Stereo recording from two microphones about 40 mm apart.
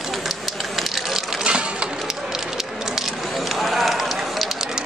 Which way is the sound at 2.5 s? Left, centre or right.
Centre.